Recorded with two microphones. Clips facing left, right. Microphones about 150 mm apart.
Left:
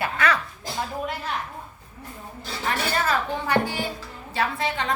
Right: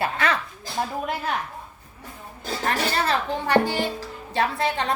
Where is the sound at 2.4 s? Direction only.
45° right (ahead or behind).